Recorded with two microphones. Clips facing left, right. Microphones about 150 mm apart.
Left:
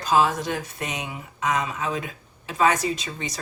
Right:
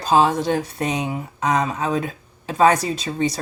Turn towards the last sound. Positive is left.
turn(degrees=-35)  # may be behind; listen again after turning